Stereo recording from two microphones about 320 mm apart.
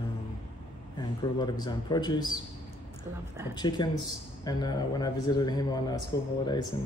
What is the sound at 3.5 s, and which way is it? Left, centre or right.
Speech, centre.